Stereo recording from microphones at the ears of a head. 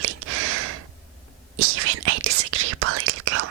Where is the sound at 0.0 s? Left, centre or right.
Right.